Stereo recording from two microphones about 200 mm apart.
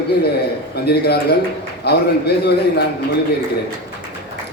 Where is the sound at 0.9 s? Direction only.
55° left (ahead or behind).